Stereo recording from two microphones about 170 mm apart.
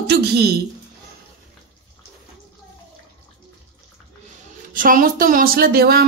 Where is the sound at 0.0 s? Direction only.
75° right (ahead or behind).